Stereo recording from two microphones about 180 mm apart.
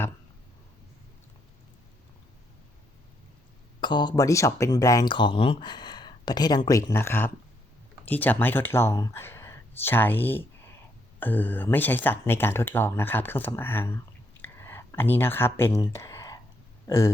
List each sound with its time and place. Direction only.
3.8 s speech: 25° left (ahead or behind)
14.4 s a sound: 15° left (ahead or behind)
16.8 s speech: 15° left (ahead or behind)